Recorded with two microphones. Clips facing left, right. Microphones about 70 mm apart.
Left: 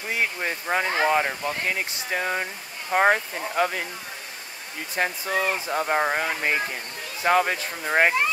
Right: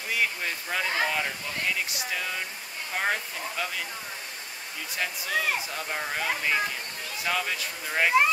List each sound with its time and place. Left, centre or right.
0.1 s speech: left
4.9 s speech: left